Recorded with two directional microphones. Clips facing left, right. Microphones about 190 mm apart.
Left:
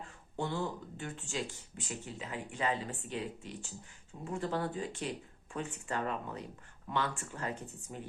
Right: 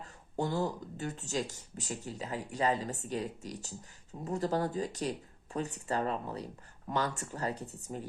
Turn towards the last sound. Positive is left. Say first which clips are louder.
# right 3 dB
turn(degrees=-35)  # may be behind; listen again after turning